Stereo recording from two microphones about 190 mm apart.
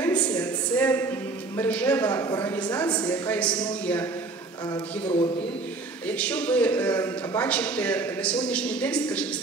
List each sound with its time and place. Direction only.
0.0 s a sound: 10° left (ahead or behind)
1.6 s a man's voice: 10° left (ahead or behind)
5.0 s a man's voice: 30° left (ahead or behind)
6.0 s a man's voice: 5° left (ahead or behind)